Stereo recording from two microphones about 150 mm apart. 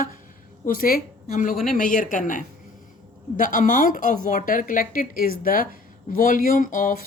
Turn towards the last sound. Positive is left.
turn(degrees=60)  # may be behind; listen again after turning